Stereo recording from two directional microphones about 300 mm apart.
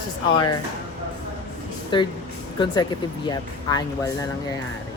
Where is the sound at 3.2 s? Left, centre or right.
Centre.